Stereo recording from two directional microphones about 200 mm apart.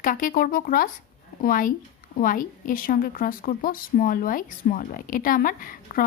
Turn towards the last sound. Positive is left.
turn(degrees=45)  # may be behind; listen again after turning